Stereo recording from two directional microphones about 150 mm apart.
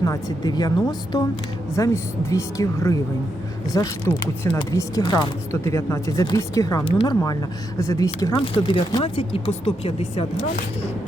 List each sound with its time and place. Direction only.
0.0 s speech: 25° left (ahead or behind)
6.8 s speech: 35° left (ahead or behind)
7.8 s speech: 20° left (ahead or behind)
8.4 s speech: 35° left (ahead or behind)